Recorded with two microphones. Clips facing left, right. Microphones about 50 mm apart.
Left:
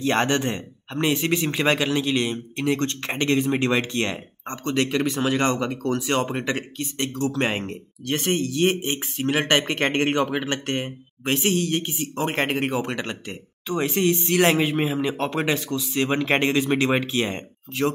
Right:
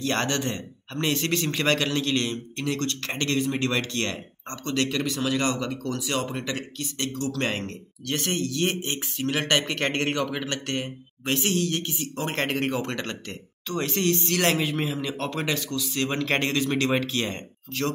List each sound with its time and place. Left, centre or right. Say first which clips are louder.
0.0 s speech: left 4 dB; left